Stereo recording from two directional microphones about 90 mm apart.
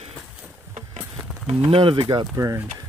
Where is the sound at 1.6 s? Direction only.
85° right; by 2.3 s 70° right (ahead or behind).